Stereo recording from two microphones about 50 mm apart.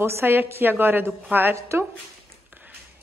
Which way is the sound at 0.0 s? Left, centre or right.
Right.